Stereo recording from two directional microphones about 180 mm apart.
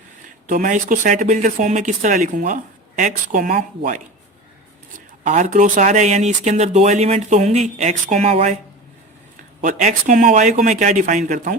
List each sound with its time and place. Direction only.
0.4 s speech: 45° right (ahead or behind)
9.6 s speech: 45° right (ahead or behind)